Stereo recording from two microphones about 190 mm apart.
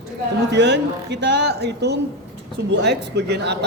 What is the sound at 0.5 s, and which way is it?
Speech, 70° right (ahead or behind).